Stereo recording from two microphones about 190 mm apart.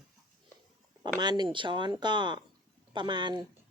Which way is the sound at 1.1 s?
20° right (ahead or behind).